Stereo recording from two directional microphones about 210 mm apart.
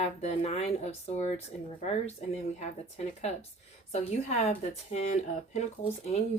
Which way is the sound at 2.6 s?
30° left (ahead or behind).